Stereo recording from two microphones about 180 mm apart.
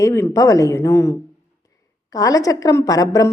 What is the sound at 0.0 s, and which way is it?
Speech, 15° left (ahead or behind).